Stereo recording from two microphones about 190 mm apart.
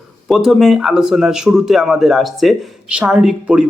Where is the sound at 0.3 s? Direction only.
Centre (ahead or behind).